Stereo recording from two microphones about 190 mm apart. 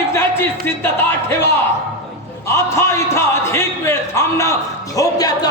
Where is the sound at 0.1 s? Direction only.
15° left (ahead or behind).